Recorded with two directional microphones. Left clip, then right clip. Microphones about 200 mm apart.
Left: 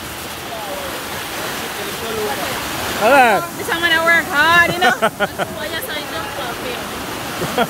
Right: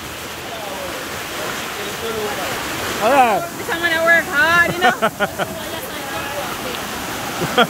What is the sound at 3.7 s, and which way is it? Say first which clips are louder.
Speech: left 1 dB; 50° left (ahead or behind).